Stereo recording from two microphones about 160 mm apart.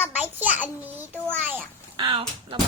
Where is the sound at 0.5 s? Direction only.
10° right (ahead or behind).